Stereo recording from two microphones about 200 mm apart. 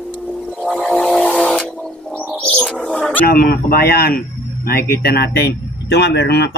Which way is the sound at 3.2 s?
50° left (ahead or behind).